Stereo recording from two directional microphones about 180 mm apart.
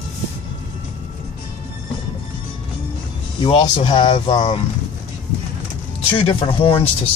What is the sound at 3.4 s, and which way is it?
Speech, 30° left (ahead or behind).